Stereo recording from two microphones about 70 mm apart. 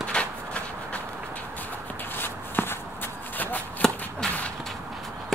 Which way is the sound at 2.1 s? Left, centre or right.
Left.